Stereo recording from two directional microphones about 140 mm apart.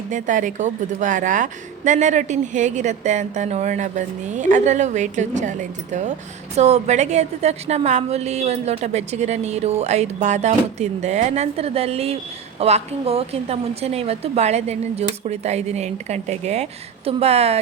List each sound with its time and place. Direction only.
0.1 s a woman's voice: 65° right (ahead or behind); by 17.6 s 45° right (ahead or behind)